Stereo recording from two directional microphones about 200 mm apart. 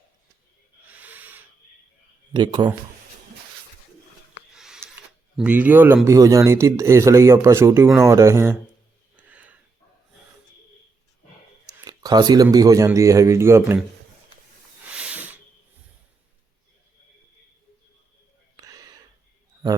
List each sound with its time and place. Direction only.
0.9 s owl: 10° right (ahead or behind)
2.3 s speech: 20° right (ahead or behind)
4.5 s a sound: centre (ahead or behind)
5.4 s speech: 10° right (ahead or behind)
9.1 s a sound: 5° right (ahead or behind)
11.6 s speech: 20° right (ahead or behind)
14.9 s snake: 5° right (ahead or behind)
18.5 s gasp: 15° right (ahead or behind)